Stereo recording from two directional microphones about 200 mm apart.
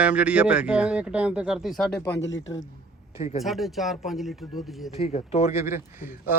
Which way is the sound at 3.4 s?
Centre (ahead or behind).